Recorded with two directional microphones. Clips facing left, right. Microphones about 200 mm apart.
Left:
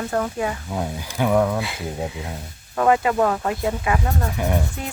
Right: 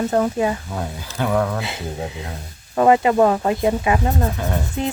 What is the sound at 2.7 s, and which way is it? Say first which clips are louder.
Speech: right 4 dB; 20° right (ahead or behind).